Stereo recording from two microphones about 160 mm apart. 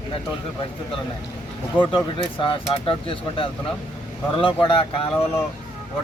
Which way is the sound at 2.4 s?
35° left (ahead or behind).